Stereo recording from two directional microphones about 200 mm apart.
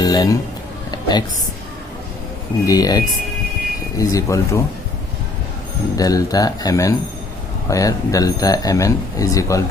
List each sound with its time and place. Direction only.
0.0 s a man's voice: 20° left (ahead or behind)
0.9 s a sound: 20° left (ahead or behind)
2.6 s speech: 20° left (ahead or behind)
6.0 s speech: 15° left (ahead or behind)